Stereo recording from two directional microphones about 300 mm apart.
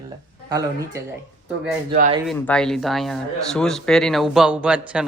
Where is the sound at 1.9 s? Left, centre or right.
Right.